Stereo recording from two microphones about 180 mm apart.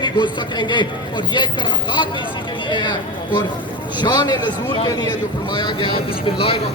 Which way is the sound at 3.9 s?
25° left (ahead or behind).